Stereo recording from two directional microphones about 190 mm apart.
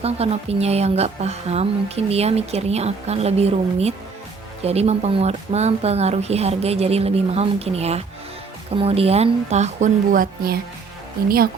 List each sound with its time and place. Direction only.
0.0 s speech: 30° right (ahead or behind); by 10.6 s 50° right (ahead or behind)